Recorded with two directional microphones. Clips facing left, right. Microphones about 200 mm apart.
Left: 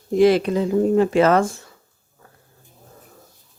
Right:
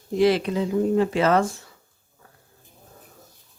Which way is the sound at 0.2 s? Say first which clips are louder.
Left 4 dB; 50° left (ahead or behind).